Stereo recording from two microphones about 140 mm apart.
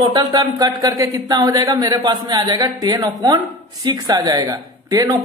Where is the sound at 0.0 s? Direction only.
30° right (ahead or behind).